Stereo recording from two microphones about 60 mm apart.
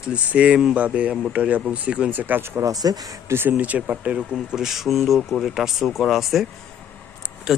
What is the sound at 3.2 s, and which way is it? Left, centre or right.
Speech, right.